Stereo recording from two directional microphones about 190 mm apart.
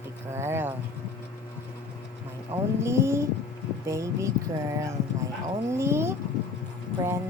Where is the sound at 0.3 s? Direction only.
15° right (ahead or behind).